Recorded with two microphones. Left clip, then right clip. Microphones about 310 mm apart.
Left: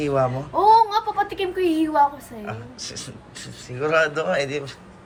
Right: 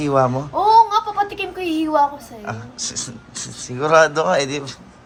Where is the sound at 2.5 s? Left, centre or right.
Centre.